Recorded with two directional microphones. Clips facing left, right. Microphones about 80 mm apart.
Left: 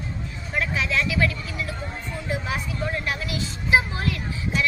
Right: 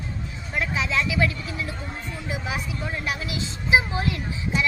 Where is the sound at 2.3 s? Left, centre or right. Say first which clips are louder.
Left 2 dB; centre.